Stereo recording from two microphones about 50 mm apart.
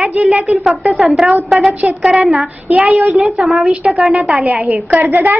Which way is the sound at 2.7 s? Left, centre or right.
Right.